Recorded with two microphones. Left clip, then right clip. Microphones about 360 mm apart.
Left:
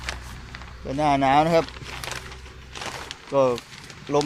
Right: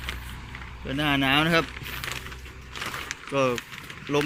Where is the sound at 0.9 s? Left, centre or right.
Centre.